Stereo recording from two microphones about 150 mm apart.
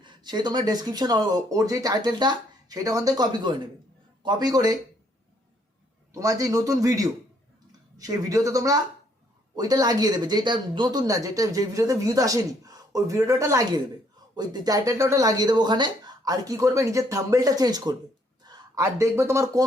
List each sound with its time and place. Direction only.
0.0 s speech: 30° right (ahead or behind)
6.1 s speech: 25° right (ahead or behind)